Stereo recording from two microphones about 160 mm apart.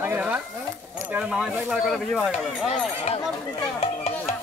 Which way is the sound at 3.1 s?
40° left (ahead or behind).